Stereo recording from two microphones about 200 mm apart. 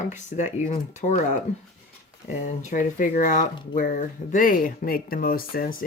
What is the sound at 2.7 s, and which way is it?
Speech, 40° left (ahead or behind).